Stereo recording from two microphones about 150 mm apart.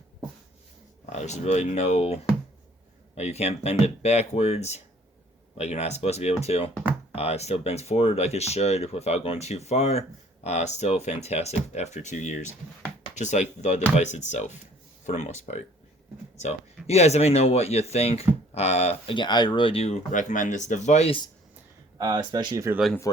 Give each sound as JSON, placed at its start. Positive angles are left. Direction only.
{"t": 1.1, "sound": "speech", "side_deg": 50}
{"t": 16.8, "sound": "speech", "side_deg": 45}
{"t": 21.9, "sound": "speech", "side_deg": -25}